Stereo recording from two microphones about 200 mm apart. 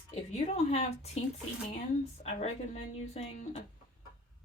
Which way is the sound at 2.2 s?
30° left (ahead or behind).